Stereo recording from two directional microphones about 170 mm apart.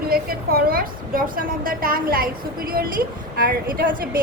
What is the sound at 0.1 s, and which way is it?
A woman's voice, 60° right (ahead or behind).